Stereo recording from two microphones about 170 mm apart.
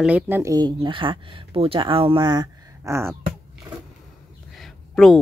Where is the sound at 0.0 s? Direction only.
10° right (ahead or behind).